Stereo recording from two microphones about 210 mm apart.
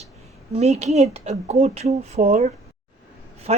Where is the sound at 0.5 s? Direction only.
30° right (ahead or behind).